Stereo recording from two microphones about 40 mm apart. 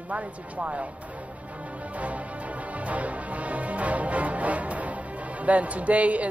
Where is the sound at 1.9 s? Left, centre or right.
Right.